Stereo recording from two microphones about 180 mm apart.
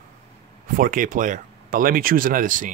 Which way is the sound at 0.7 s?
50° right (ahead or behind).